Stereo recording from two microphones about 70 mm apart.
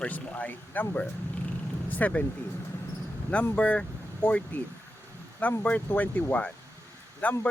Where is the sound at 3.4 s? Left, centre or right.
Centre.